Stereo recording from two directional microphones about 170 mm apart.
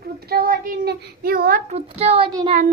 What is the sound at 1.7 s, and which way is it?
Speech, 35° right (ahead or behind).